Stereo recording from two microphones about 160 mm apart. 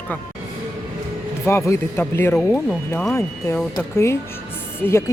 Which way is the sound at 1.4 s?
15° left (ahead or behind).